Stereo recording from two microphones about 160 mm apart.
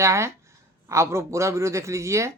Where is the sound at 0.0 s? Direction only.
15° right (ahead or behind).